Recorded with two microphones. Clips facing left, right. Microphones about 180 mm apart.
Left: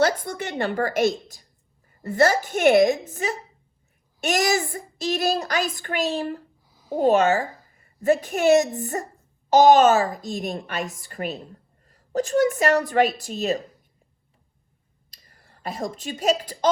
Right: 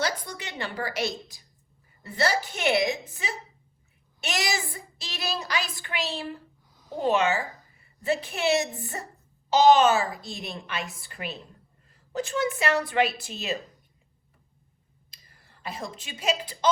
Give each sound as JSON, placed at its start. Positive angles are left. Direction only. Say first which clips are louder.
{"t": 0.0, "sound": "a woman's voice", "louder": "left 8 dB", "side_deg": 50}
{"t": 6.7, "sound": "a sound", "louder": "left 1 dB", "side_deg": 10}
{"t": 6.9, "sound": "a woman's voice", "louder": "left 6 dB", "side_deg": 45}
{"t": 15.1, "sound": "speech", "louder": "left 3 dB", "side_deg": 40}